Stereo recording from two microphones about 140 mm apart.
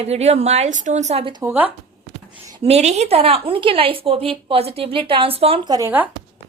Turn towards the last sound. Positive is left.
turn(degrees=-30)  # may be behind; listen again after turning